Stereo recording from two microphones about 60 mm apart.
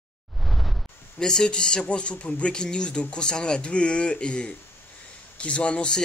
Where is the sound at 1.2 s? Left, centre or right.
Centre.